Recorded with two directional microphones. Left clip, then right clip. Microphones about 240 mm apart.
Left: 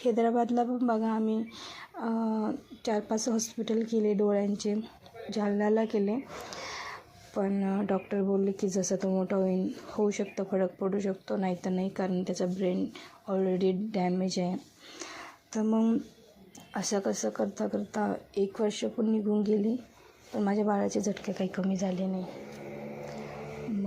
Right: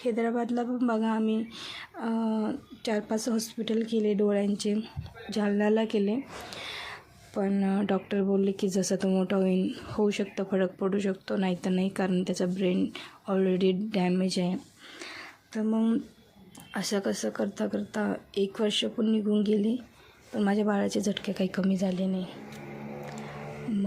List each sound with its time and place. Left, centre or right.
0.0 s speech: centre
7.3 s speech: centre
14.9 s a sound: centre
16.7 s speech: centre
21.2 s a woman's voice: right